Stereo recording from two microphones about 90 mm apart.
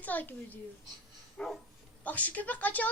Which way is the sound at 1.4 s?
10° left (ahead or behind).